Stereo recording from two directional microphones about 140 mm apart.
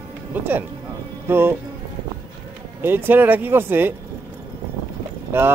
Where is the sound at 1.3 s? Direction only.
15° right (ahead or behind).